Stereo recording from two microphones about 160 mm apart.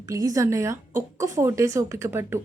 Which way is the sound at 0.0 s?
20° right (ahead or behind).